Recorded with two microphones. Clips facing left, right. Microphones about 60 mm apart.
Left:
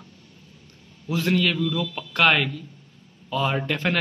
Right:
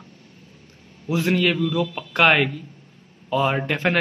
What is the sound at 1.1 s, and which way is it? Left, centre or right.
A man's voice, centre.